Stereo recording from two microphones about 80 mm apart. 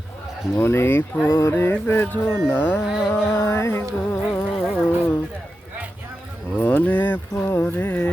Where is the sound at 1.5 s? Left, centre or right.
Left.